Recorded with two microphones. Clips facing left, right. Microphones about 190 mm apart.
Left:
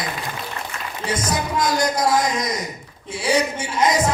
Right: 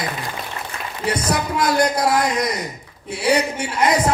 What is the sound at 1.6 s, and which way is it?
Music, 60° right (ahead or behind).